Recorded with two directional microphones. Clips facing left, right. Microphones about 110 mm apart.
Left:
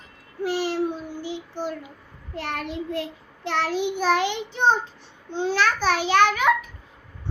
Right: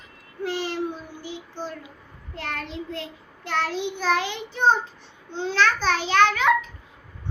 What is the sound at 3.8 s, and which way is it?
Speech, 15° left (ahead or behind).